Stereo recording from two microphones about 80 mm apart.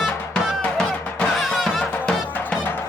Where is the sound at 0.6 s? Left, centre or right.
Centre.